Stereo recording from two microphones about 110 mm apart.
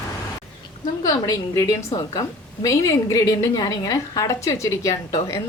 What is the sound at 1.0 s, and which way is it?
A woman's voice, 35° left (ahead or behind).